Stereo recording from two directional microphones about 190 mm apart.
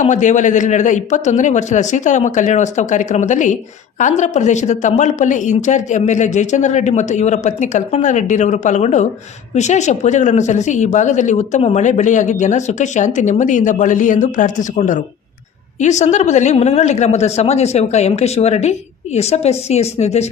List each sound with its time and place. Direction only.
0.0 s a man's voice: 40° left (ahead or behind)